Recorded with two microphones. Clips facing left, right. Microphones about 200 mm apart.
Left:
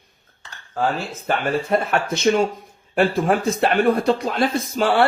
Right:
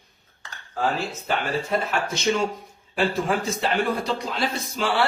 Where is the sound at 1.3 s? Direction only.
55° left (ahead or behind).